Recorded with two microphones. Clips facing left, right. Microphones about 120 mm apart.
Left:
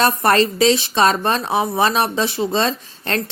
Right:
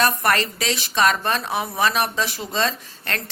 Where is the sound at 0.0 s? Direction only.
30° left (ahead or behind).